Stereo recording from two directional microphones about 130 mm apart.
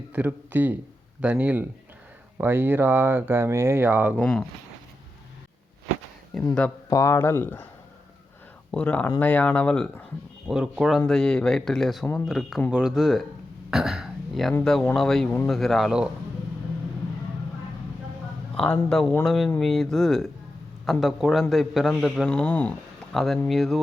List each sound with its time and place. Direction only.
0.1 s speech: 15° right (ahead or behind)
4.2 s speech: 10° left (ahead or behind)
6.3 s speech: centre (ahead or behind)
6.9 s speech: 20° left (ahead or behind)
8.7 s speech: 10° left (ahead or behind)
10.4 s speech: 5° right (ahead or behind)
13.7 s a sound: 5° right (ahead or behind)
14.6 s speech: 5° left (ahead or behind)
18.5 s speech: 5° left (ahead or behind)